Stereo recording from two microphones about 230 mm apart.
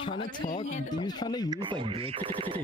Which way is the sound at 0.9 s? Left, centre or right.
Centre.